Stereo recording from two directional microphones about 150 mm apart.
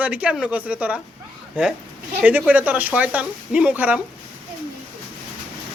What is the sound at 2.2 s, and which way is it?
A woman's voice, 10° right (ahead or behind).